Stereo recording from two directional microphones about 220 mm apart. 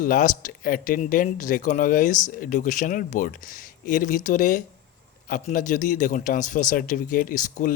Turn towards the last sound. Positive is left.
turn(degrees=35)  # may be behind; listen again after turning